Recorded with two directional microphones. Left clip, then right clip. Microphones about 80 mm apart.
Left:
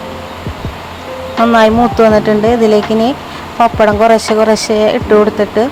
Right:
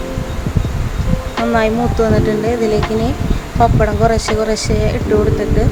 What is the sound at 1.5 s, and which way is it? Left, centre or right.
Speech, left.